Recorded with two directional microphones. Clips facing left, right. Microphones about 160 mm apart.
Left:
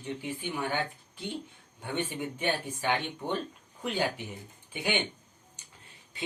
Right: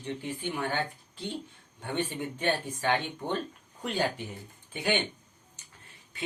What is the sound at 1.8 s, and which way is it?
Speech, 10° left (ahead or behind).